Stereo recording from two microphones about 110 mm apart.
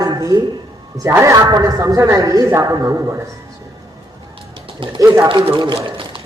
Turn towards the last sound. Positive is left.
turn(degrees=-55)  # may be behind; listen again after turning